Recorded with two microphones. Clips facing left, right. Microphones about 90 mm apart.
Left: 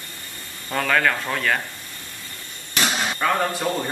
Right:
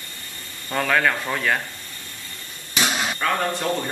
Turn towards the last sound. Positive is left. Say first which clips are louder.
# left 1 dB
turn(degrees=5)  # may be behind; listen again after turning